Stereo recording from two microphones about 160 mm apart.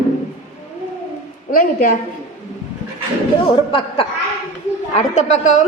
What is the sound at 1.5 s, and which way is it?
Speech, 55° left (ahead or behind).